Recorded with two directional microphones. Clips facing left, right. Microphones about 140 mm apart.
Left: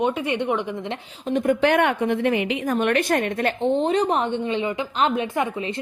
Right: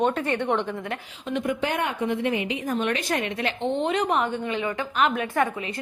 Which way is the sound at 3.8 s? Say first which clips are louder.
Left 3 dB; 35° left (ahead or behind).